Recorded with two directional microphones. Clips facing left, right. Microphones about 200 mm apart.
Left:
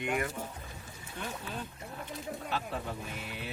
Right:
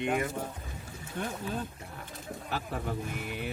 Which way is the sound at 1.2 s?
55° right (ahead or behind).